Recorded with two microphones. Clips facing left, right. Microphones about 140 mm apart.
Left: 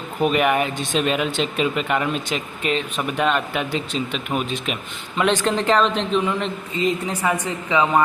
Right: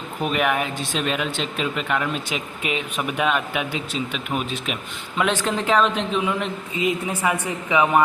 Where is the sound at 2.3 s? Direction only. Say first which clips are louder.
Left 3 dB; 10° right (ahead or behind).